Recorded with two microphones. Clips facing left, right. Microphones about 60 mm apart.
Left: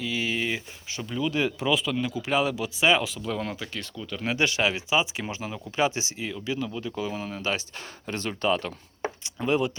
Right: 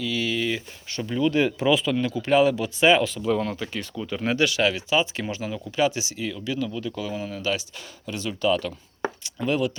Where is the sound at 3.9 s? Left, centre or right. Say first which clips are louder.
Right 7 dB; right.